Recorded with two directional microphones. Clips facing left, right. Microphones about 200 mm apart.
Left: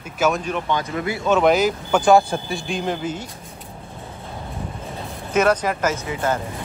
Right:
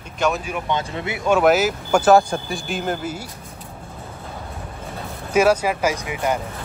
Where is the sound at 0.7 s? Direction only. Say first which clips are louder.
Even; 25° right (ahead or behind).